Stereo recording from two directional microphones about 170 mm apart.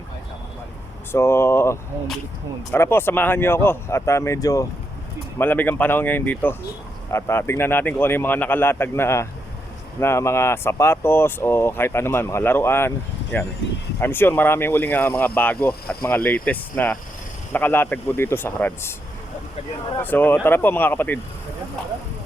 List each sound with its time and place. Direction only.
1.1 s speech: 15° left (ahead or behind)
20.0 s speech: 10° left (ahead or behind)